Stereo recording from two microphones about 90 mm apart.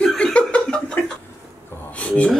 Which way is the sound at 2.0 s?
15° left (ahead or behind).